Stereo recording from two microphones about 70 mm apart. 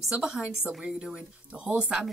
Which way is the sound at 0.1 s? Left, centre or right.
Centre.